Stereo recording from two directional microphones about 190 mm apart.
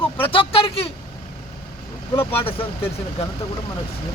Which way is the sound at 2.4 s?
30° left (ahead or behind).